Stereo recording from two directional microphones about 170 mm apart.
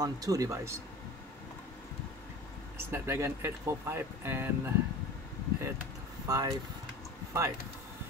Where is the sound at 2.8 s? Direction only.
15° right (ahead or behind).